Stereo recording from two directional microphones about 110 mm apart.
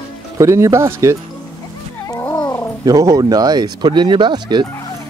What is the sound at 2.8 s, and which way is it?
Speech, 30° right (ahead or behind).